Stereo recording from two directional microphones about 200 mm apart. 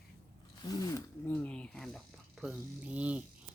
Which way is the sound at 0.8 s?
15° left (ahead or behind).